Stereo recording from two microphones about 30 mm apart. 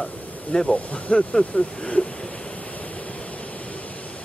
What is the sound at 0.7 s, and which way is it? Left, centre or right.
Speech, left.